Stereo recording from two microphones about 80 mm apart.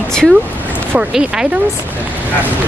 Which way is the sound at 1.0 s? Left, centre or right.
Centre.